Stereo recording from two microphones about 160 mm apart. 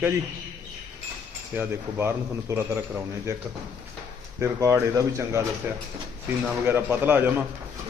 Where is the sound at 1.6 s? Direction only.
15° right (ahead or behind).